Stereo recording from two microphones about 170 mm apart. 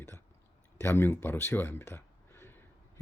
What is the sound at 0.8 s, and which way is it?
Speech, 15° left (ahead or behind).